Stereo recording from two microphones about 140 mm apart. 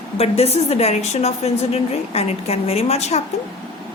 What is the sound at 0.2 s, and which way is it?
A woman's voice, 45° left (ahead or behind).